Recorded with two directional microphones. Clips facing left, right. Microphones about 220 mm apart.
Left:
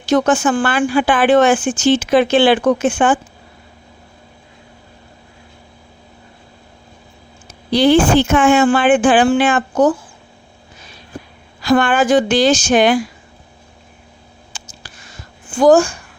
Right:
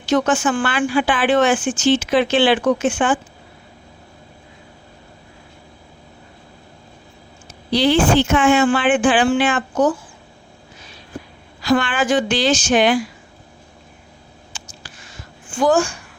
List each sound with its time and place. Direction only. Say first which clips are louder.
0.0 s a woman's voice: left 3 dB; 40° left (ahead or behind)
7.7 s a woman's voice: left 4 dB; 50° left (ahead or behind)
11.6 s a woman's voice: left 4 dB; 50° left (ahead or behind)
14.5 s a sound: left 2 dB; 40° left (ahead or behind)
15.5 s speech: left 6 dB; 40° left (ahead or behind)